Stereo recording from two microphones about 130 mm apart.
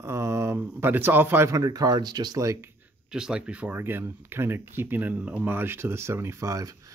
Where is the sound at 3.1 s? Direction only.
5° right (ahead or behind); by 6.9 s 25° right (ahead or behind).